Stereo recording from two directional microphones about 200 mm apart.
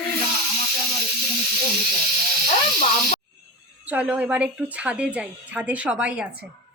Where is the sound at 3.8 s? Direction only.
5° right (ahead or behind).